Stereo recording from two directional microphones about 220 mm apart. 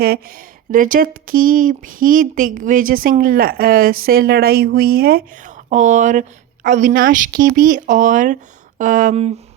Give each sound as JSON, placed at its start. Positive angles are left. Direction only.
{"t": 0.0, "sound": "speech", "side_deg": -40}